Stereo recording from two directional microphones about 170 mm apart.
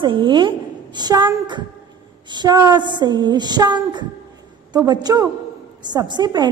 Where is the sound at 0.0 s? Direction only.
30° right (ahead or behind).